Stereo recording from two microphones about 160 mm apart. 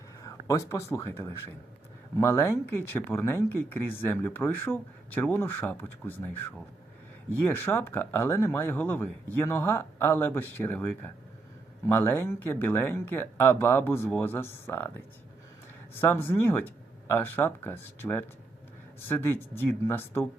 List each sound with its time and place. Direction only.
0.3 s speech: 20° left (ahead or behind)
7.4 s speech: 15° left (ahead or behind)
16.0 s speech: 15° left (ahead or behind)